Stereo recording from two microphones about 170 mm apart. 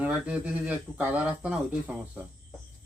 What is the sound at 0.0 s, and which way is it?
Speech, 5° right (ahead or behind).